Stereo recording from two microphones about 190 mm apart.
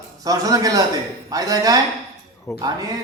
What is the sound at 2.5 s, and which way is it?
Speech, 15° left (ahead or behind).